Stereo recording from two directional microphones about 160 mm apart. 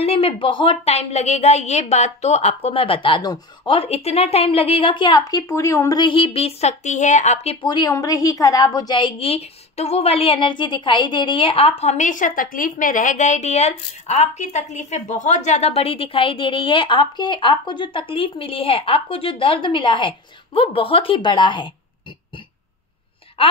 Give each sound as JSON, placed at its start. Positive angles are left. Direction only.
{"t": 0.0, "sound": "a woman's voice", "side_deg": 35}
{"t": 6.0, "sound": "speech", "side_deg": 35}
{"t": 7.6, "sound": "a woman's voice", "side_deg": 25}